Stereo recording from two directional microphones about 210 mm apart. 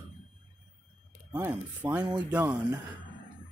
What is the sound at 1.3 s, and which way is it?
Speech, 10° right (ahead or behind).